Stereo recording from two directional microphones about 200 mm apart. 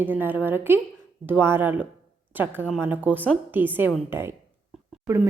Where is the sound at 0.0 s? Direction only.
10° right (ahead or behind).